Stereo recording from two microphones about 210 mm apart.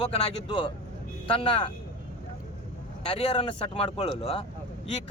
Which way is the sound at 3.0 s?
30° left (ahead or behind).